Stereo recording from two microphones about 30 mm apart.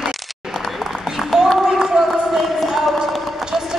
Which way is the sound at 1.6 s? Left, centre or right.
Centre.